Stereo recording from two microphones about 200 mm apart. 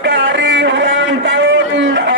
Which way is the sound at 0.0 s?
60° right (ahead or behind).